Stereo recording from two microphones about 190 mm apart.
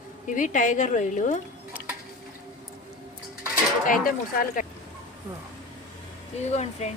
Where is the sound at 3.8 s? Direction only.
45° left (ahead or behind).